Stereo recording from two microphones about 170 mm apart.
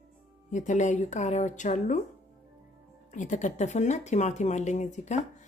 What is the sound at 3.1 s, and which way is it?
Speech, 45° left (ahead or behind).